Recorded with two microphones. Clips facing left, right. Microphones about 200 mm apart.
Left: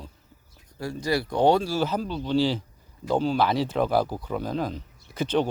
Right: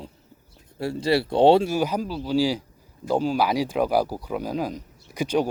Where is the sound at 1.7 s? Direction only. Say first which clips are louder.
Right 2 dB; 10° right (ahead or behind).